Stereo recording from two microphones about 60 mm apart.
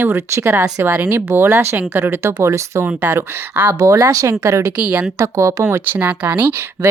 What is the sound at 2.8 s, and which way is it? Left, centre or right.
Speech, right.